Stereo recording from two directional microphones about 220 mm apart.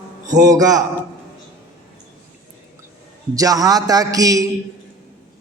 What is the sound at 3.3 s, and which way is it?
A man's voice, 15° right (ahead or behind).